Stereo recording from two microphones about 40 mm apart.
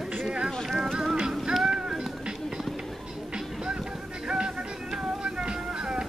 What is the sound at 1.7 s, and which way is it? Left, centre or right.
Music, centre.